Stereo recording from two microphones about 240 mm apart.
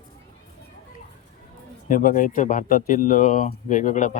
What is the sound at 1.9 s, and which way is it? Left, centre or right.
Speech, left.